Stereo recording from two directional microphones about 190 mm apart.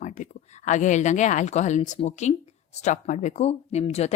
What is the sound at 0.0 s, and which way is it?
Speech, 40° left (ahead or behind).